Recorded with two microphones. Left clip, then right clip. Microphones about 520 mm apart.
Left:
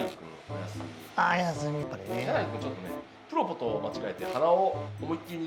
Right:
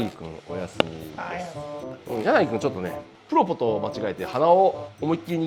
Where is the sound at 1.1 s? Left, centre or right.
Left.